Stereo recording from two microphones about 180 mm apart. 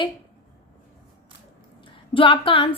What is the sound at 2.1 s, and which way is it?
Speech, 30° left (ahead or behind).